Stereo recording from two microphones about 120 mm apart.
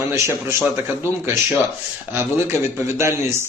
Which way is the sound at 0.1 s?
25° right (ahead or behind).